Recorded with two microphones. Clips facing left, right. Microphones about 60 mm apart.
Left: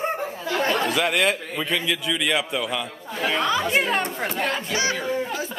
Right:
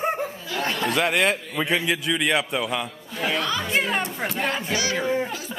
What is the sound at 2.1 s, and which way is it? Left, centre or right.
A man's voice, centre.